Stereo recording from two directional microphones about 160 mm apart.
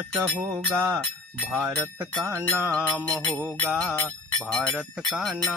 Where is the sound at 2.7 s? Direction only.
5° left (ahead or behind).